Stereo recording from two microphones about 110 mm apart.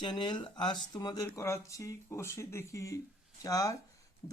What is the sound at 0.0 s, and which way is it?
Speech, 45° left (ahead or behind).